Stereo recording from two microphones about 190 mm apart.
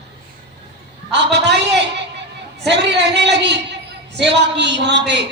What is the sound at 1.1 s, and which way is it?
A man's voice, 65° right (ahead or behind).